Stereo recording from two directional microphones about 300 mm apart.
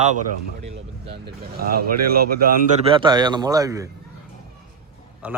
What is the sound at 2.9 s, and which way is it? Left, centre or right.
Speech, centre.